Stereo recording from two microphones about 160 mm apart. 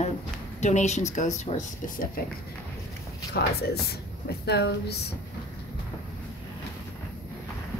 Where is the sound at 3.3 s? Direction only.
85° left.